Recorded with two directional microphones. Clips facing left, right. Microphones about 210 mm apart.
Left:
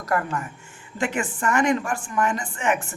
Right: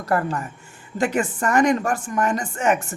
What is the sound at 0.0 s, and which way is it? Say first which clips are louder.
Speech: right 3 dB; 35° right (ahead or behind).